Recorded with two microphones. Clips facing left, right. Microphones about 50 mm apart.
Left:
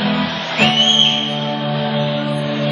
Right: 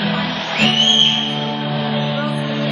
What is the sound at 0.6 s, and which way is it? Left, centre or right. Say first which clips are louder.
Music: left 1 dB; left.